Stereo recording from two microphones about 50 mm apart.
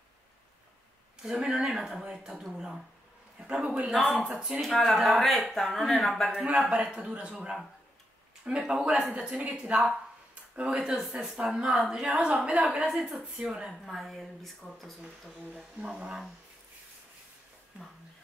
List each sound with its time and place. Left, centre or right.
1.2 s a woman's voice: centre
3.3 s a man's voice: right
3.9 s speech: centre
4.2 s a woman's voice: centre
4.6 s speech: centre
6.5 s a woman's voice: centre
6.8 s a man's voice: right
9.1 s a man's voice: right
13.8 s speech: centre
15.8 s a woman's voice: right